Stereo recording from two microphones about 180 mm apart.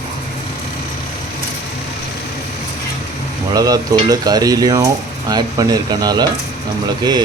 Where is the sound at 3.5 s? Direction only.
20° right (ahead or behind).